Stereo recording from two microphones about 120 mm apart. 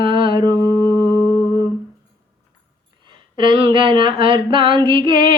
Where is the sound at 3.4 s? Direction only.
45° right (ahead or behind).